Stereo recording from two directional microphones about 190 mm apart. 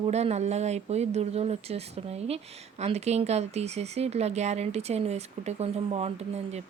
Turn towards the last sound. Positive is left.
turn(degrees=-35)  # may be behind; listen again after turning